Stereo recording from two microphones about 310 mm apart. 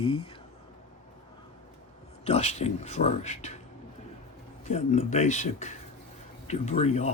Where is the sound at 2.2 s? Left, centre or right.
Centre.